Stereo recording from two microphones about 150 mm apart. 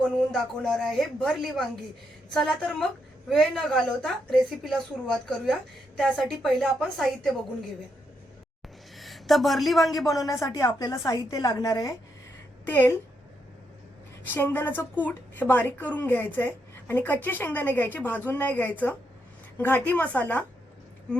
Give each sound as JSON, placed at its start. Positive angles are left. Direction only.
{"t": 0.0, "sound": "a woman's voice", "side_deg": 5}
{"t": 9.0, "sound": "a woman's voice", "side_deg": 0}
{"t": 10.1, "sound": "a woman's voice", "side_deg": 25}
{"t": 12.6, "sound": "a woman's voice", "side_deg": 15}
{"t": 14.3, "sound": "a woman's voice", "side_deg": 15}